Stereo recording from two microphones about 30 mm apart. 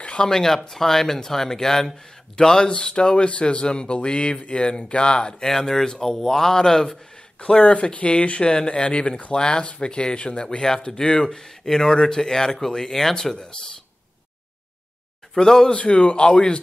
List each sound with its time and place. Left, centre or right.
0.2 s speech: centre
2.7 s speech: left
5.4 s speech: centre
7.3 s speech: left
10.3 s speech: left
15.3 s speech: centre
15.7 s speech: left